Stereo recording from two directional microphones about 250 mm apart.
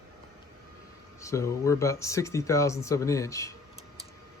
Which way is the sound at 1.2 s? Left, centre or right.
Centre.